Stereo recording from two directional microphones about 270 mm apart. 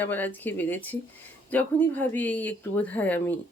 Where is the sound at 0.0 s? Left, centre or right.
Centre.